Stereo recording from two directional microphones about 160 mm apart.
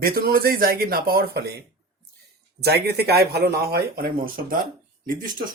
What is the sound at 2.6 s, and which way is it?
Speech, 90° right.